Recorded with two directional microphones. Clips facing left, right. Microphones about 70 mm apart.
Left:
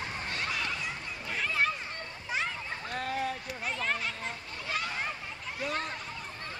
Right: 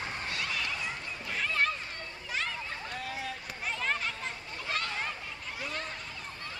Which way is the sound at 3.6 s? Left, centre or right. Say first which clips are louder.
Even; centre.